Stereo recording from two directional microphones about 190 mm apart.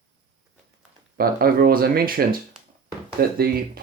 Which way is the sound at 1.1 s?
50° right (ahead or behind).